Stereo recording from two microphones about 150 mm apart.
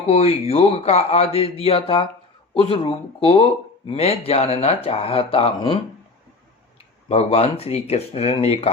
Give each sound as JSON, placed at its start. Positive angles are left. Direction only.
{"t": 0.1, "sound": "speech", "side_deg": 40}
{"t": 7.1, "sound": "speech", "side_deg": 45}